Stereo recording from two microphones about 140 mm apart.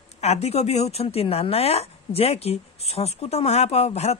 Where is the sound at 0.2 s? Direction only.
50° left (ahead or behind).